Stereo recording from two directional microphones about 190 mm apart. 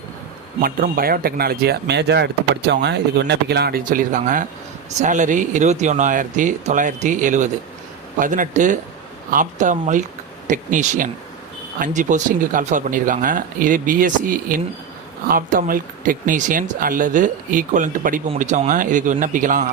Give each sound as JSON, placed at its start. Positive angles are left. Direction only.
{"t": 0.6, "sound": "speech", "side_deg": -50}